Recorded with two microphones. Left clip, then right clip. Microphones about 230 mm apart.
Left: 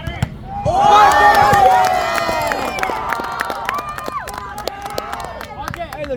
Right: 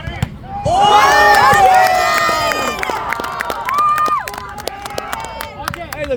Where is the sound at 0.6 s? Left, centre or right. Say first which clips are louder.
Right 2 dB; right.